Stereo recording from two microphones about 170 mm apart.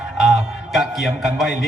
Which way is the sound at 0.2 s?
5° right (ahead or behind).